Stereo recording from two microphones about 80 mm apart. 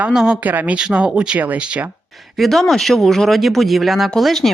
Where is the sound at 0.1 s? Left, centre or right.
Centre.